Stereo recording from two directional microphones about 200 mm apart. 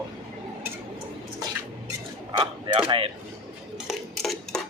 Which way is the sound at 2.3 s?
25° right (ahead or behind).